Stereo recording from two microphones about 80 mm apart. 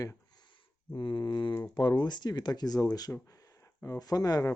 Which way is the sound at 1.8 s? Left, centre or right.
Left.